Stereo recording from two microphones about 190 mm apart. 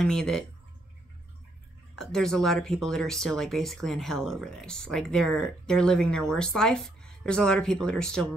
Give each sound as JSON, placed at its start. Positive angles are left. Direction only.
{"t": 0.0, "sound": "speech", "side_deg": 5}
{"t": 2.0, "sound": "speech", "side_deg": 0}